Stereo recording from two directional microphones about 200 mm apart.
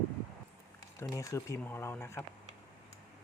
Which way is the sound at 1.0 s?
15° left (ahead or behind).